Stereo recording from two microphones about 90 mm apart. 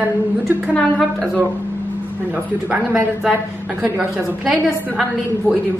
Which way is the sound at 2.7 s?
15° right (ahead or behind).